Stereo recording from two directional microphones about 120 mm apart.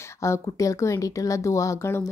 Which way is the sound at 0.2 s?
25° left (ahead or behind).